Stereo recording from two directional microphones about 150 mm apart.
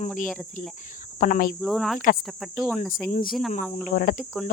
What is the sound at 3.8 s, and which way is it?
Speech, 65° left (ahead or behind).